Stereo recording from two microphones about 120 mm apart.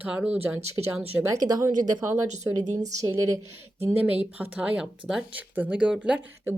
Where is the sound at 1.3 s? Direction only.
35° right (ahead or behind).